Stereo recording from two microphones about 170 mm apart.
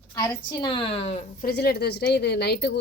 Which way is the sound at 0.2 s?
25° left (ahead or behind).